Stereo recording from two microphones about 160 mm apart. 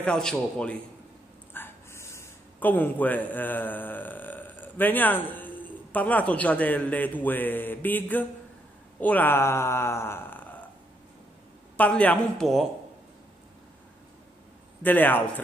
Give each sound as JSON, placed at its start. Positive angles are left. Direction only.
{"t": 0.0, "sound": "a man's voice", "side_deg": 5}
{"t": 11.7, "sound": "speech", "side_deg": 10}
{"t": 14.8, "sound": "speech", "side_deg": 10}